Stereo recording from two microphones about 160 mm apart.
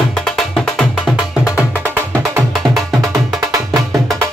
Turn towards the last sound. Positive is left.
turn(degrees=-20)  # may be behind; listen again after turning